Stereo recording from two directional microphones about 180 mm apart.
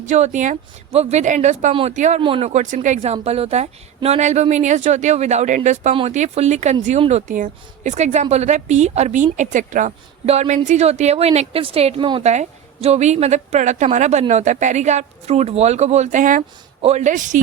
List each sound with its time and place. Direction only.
0.0 s a woman's voice: 40° right (ahead or behind)
12.2 s a woman's voice: 40° right (ahead or behind)